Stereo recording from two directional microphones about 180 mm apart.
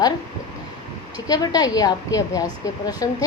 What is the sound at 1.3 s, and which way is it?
A woman's voice, 20° left (ahead or behind).